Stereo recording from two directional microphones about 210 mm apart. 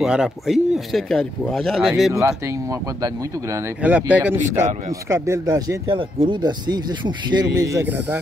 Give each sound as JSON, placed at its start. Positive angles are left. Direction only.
{"t": 0.0, "sound": "speech", "side_deg": 0}
{"t": 2.1, "sound": "speech", "side_deg": -15}